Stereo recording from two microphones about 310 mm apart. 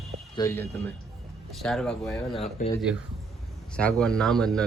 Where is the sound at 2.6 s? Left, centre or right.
Left.